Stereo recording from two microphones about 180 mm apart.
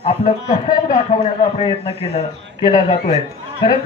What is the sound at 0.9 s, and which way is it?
A man's voice, 40° left (ahead or behind).